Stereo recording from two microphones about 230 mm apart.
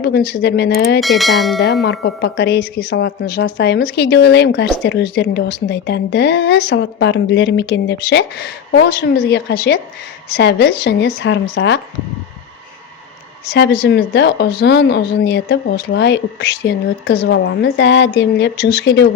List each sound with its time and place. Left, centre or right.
0.0 s a woman's voice: left
1.0 s speech: centre
1.8 s a woman's voice: left
13.8 s a woman's voice: left